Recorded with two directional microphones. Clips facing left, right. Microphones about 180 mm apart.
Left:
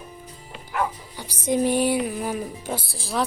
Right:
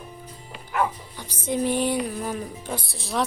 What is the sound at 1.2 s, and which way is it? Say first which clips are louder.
Music: left 3 dB; 10° left (ahead or behind).